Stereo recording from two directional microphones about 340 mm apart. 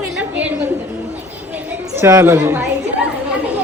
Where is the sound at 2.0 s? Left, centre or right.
Centre.